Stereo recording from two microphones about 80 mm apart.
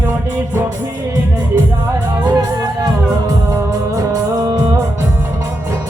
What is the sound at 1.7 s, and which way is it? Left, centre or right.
Music, right.